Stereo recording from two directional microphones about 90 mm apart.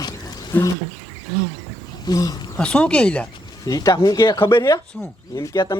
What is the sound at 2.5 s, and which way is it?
Speech, 15° left (ahead or behind).